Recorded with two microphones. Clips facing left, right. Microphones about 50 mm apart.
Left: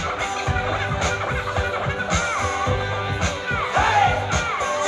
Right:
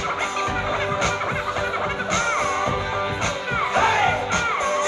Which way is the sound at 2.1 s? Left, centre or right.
Right.